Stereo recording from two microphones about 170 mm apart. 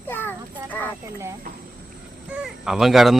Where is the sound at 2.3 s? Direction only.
5° right (ahead or behind).